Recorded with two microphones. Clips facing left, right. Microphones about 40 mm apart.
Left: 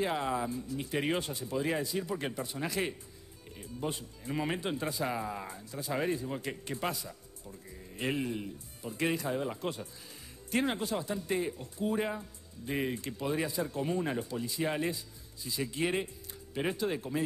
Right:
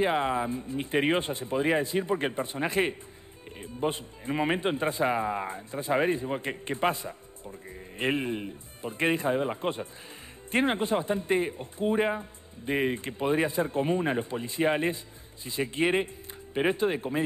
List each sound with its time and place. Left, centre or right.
0.0 s a man's voice: right